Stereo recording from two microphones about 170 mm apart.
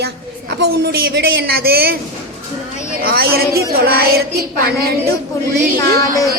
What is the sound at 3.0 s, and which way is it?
Music, 60° right (ahead or behind).